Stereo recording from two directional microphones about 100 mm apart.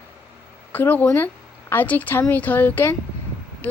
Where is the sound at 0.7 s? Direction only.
20° left (ahead or behind).